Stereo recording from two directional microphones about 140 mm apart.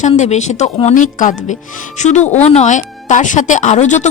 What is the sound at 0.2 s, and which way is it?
Speech, 55° left (ahead or behind).